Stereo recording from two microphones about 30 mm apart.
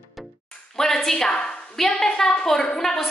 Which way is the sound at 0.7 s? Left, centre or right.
Centre.